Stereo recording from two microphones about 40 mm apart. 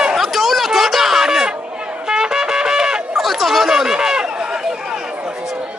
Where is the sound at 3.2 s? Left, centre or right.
Centre.